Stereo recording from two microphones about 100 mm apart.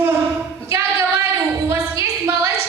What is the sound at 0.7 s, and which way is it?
Singing, 20° right (ahead or behind).